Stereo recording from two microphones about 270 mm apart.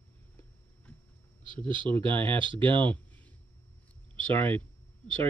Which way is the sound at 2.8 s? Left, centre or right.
Centre.